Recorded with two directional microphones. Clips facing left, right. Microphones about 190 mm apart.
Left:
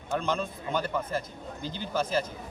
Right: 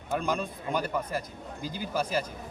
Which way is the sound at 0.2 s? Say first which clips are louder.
Even; 10° right (ahead or behind).